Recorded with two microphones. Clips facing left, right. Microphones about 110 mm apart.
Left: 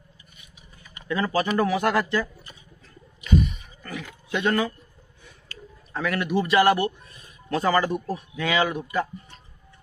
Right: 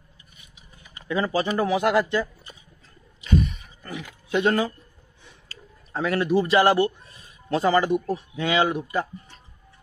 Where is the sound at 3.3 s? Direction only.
Centre (ahead or behind).